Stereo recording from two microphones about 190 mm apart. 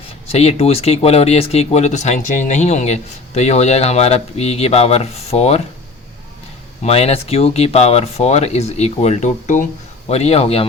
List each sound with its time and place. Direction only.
0.3 s speech: 35° left (ahead or behind)
6.8 s speech: 35° left (ahead or behind)